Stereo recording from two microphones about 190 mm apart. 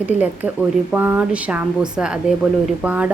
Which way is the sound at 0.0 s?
10° right (ahead or behind).